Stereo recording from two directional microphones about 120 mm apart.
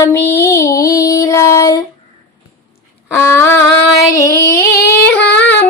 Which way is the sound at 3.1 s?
20° left (ahead or behind).